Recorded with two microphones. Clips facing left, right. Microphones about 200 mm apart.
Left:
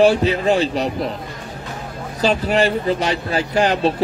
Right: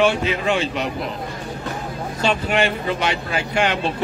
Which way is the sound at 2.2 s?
35° left (ahead or behind).